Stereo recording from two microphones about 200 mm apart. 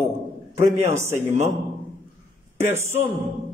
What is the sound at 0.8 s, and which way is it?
Speech, 15° right (ahead or behind).